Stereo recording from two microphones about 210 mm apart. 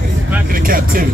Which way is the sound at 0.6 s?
45° right (ahead or behind).